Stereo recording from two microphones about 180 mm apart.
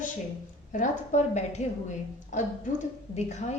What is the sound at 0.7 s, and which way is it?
A woman's voice, 40° left (ahead or behind).